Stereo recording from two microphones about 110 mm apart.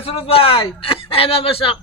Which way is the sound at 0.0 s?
60° left (ahead or behind).